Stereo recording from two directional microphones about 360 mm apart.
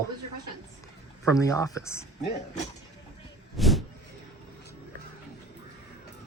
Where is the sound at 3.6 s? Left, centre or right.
Centre.